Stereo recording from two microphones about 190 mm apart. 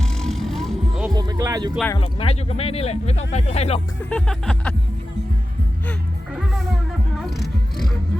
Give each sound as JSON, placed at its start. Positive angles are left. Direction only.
{"t": 0.0, "sound": "vehicle", "side_deg": 0}
{"t": 1.0, "sound": "music", "side_deg": -20}
{"t": 2.0, "sound": "speech", "side_deg": 30}
{"t": 4.1, "sound": "speech", "side_deg": 5}
{"t": 6.3, "sound": "music", "side_deg": 0}